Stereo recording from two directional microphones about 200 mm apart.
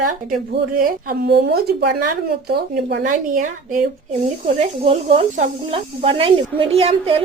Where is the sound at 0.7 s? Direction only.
45° right (ahead or behind).